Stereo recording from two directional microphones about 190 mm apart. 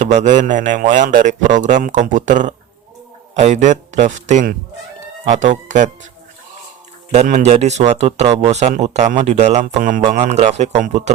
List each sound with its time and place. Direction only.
0.0 s speech: 40° right (ahead or behind)
7.1 s speech: 35° right (ahead or behind)